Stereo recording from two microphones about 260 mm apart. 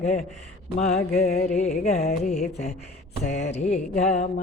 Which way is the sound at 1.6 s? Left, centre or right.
Left.